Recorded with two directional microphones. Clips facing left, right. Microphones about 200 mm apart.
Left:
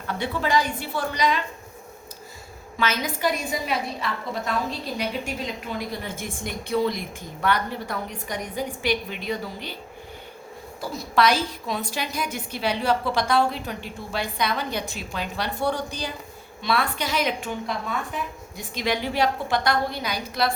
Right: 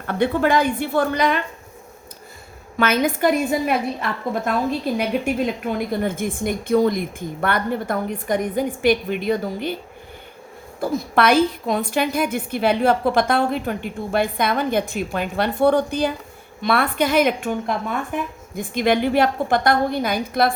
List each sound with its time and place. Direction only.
0.1 s a woman's voice: 55° right (ahead or behind)
2.7 s a woman's voice: 55° right (ahead or behind)
10.8 s a woman's voice: 55° right (ahead or behind)